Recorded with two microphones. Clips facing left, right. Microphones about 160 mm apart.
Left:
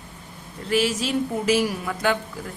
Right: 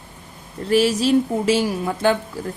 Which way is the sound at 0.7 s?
35° right (ahead or behind).